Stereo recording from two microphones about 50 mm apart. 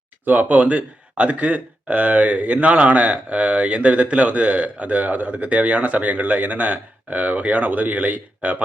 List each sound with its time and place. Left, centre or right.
0.3 s speech: right